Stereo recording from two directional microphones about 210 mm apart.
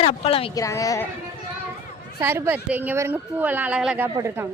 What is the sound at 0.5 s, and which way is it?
Speech, 15° left (ahead or behind).